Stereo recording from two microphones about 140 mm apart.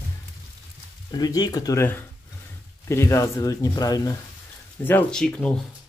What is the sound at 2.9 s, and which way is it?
Speech, 20° left (ahead or behind).